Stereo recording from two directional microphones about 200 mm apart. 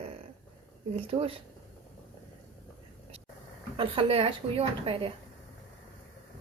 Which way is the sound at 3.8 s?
25° right (ahead or behind).